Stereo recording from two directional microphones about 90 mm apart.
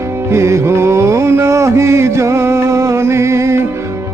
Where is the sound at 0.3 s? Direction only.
30° right (ahead or behind).